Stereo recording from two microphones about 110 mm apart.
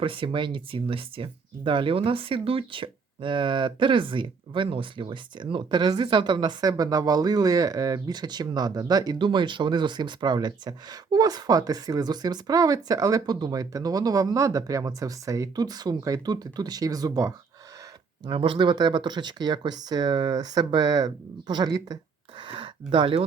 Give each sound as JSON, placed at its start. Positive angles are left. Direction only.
{"t": 0.0, "sound": "speech", "side_deg": -50}
{"t": 18.3, "sound": "speech", "side_deg": -50}
{"t": 22.4, "sound": "a sound", "side_deg": -50}